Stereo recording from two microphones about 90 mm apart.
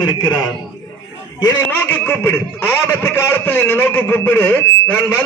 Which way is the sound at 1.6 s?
20° left (ahead or behind).